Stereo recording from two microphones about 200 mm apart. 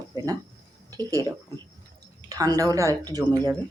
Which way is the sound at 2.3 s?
20° right (ahead or behind).